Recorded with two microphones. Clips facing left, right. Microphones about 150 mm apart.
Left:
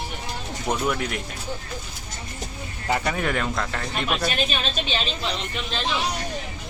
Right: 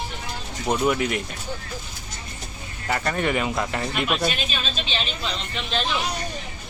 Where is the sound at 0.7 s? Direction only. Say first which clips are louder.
Right 3 dB; 5° right (ahead or behind).